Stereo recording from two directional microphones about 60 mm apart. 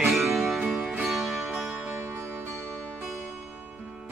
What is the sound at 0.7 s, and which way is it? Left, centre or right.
Music, right.